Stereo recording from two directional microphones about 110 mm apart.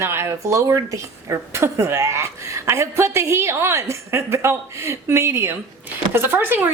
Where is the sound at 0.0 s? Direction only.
25° right (ahead or behind).